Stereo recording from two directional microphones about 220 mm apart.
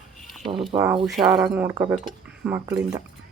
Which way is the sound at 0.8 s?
5° right (ahead or behind).